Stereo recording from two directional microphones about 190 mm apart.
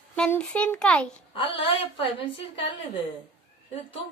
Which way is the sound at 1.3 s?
30° left (ahead or behind).